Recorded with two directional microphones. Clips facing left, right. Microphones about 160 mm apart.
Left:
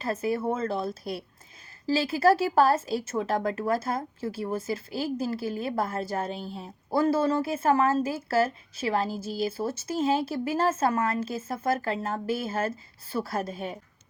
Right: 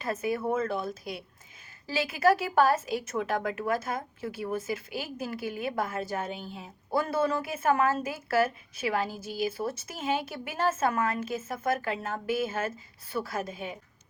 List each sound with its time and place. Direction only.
0.0 s speech: 30° left (ahead or behind)